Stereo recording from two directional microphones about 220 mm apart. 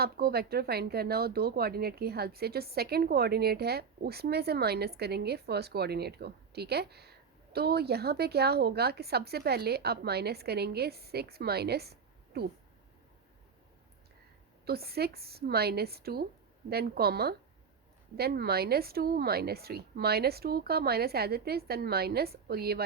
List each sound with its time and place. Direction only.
0.0 s speech: 45° right (ahead or behind)
14.6 s speech: 45° right (ahead or behind)